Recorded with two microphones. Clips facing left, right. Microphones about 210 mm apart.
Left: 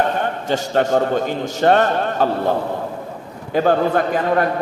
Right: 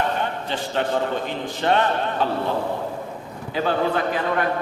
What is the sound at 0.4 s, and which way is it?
A man's voice, 45° left (ahead or behind).